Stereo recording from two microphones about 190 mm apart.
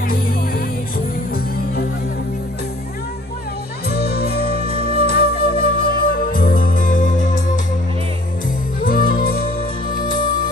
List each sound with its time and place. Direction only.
3.8 s flute: 55° left (ahead or behind)
8.8 s music: 50° left (ahead or behind)